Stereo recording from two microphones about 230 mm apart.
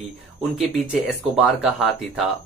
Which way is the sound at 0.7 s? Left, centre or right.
Centre.